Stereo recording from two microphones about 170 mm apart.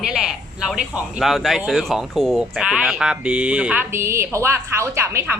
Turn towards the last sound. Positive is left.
turn(degrees=-15)  # may be behind; listen again after turning